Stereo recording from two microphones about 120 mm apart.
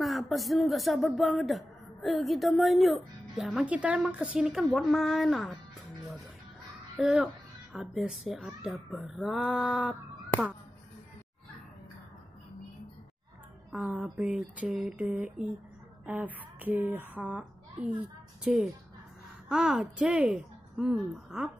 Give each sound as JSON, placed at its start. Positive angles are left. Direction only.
{"t": 0.0, "sound": "speech", "side_deg": 0}
{"t": 3.6, "sound": "speech", "side_deg": -10}
{"t": 7.0, "sound": "speech", "side_deg": -5}
{"t": 13.7, "sound": "a woman's voice", "side_deg": -10}